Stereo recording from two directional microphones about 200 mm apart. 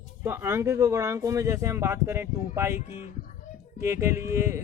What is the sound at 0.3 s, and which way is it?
Speech, 10° right (ahead or behind).